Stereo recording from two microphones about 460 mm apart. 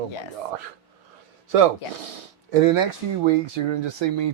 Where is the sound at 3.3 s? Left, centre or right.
Right.